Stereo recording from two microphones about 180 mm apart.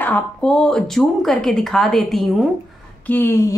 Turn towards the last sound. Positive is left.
turn(degrees=15)  # may be behind; listen again after turning